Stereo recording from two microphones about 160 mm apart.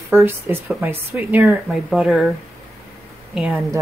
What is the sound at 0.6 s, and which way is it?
Speech, 5° right (ahead or behind).